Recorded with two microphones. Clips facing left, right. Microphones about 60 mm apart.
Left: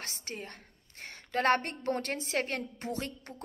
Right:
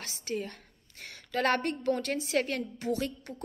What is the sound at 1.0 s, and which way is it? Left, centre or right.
A woman's voice, left.